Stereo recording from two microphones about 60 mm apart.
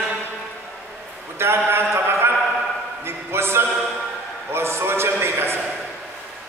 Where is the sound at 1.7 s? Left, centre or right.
Right.